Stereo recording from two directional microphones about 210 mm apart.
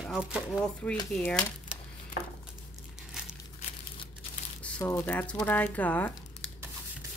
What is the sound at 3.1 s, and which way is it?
Crumpling, 5° right (ahead or behind).